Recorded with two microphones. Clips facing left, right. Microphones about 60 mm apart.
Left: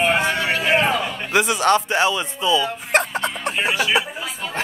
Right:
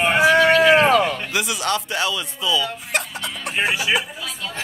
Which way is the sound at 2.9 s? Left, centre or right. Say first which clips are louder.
Left 7 dB; left.